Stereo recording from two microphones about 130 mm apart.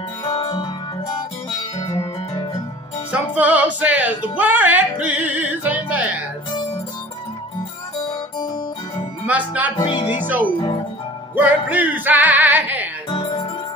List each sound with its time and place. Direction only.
0.2 s music: 40° left (ahead or behind)
1.8 s music: 25° left (ahead or behind)
3.1 s music: 10° right (ahead or behind)
9.2 s speech: 10° right (ahead or behind)
9.8 s speech: 40° left (ahead or behind)
10.2 s music: 15° right (ahead or behind)
13.1 s music: 45° left (ahead or behind)